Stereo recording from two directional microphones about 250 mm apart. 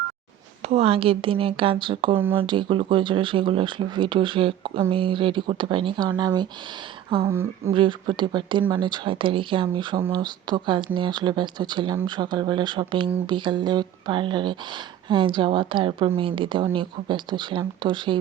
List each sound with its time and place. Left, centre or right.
0.7 s speech: right